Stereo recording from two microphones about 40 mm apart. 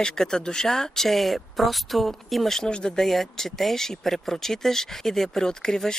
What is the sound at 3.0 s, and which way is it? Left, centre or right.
Speech, centre.